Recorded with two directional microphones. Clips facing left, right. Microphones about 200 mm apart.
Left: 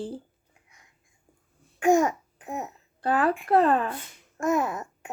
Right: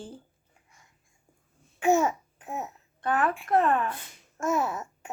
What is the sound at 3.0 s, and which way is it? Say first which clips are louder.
Speech: left 3 dB; 30° left (ahead or behind).